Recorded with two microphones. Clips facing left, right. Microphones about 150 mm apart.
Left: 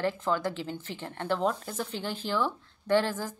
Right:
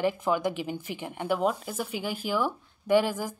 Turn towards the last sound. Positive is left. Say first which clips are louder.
# right 2 dB
turn(degrees=-10)  # may be behind; listen again after turning